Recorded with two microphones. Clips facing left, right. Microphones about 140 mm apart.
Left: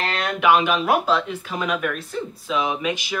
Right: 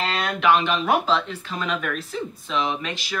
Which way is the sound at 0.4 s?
10° left (ahead or behind).